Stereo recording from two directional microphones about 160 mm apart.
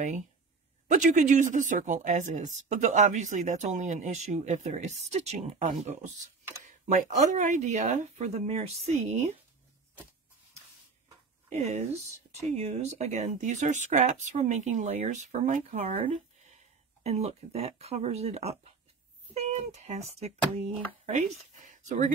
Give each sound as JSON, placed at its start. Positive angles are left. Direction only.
{"t": 0.8, "sound": "speech", "side_deg": -50}
{"t": 11.4, "sound": "speech", "side_deg": -45}